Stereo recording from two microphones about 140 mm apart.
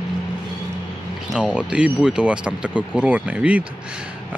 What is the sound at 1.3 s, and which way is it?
Speech, 5° right (ahead or behind).